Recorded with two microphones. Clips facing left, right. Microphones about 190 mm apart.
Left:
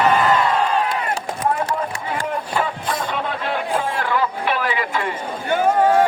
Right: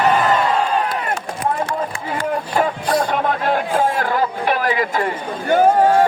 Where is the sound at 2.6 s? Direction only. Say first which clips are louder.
Right 5 dB; 45° right (ahead or behind).